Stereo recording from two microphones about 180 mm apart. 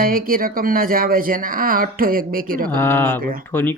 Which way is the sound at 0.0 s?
55° right (ahead or behind).